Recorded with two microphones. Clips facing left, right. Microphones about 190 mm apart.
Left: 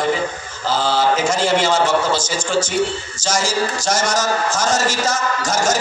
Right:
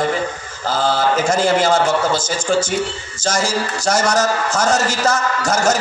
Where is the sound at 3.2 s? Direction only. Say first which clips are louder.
Even; 55° right (ahead or behind).